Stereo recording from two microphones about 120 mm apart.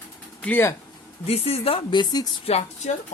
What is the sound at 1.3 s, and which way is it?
Speech, 55° left (ahead or behind).